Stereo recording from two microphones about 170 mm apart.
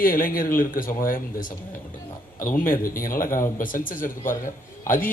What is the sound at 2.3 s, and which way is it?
A man's voice, 55° left (ahead or behind).